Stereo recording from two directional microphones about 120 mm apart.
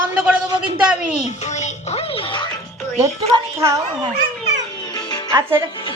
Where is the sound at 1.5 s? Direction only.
70° left (ahead or behind).